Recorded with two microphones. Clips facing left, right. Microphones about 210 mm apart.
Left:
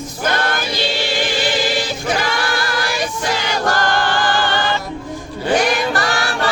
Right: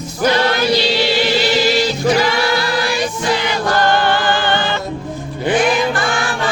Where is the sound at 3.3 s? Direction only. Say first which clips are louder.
Even; 45° left (ahead or behind).